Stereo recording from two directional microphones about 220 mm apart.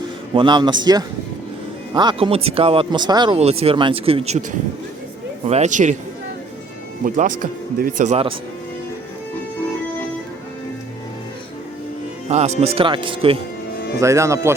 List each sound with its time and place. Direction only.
0.3 s speech: 20° right (ahead or behind)
5.5 s speech: 30° right (ahead or behind)
7.0 s speech: 40° right (ahead or behind)
12.3 s speech: 30° right (ahead or behind)
14.0 s speech: 15° right (ahead or behind)